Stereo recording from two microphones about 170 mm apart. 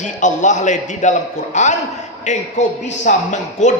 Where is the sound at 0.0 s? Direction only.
45° left (ahead or behind).